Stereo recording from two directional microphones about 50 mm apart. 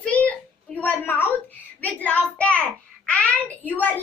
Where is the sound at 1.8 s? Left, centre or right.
Left.